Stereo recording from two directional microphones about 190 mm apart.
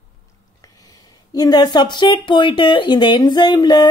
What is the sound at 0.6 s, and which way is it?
Speech, 20° left (ahead or behind).